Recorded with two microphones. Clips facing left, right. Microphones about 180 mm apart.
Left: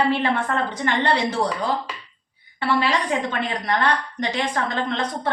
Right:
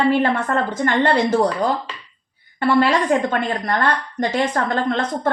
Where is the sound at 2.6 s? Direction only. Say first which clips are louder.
Right 5 dB; 45° right (ahead or behind).